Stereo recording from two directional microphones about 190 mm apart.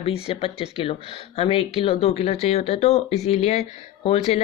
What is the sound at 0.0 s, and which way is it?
Speech, 30° left (ahead or behind).